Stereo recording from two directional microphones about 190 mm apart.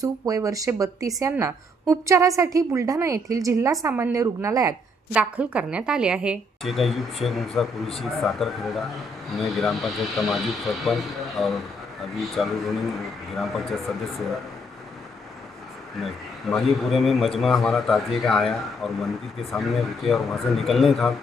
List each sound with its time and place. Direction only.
0.0 s speech: 20° right (ahead or behind); by 14.3 s centre (ahead or behind)
16.0 s speech: centre (ahead or behind)